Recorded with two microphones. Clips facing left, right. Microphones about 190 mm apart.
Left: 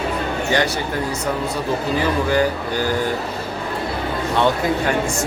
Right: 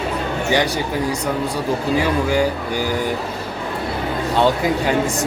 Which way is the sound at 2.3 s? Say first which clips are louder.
Even; 10° right (ahead or behind).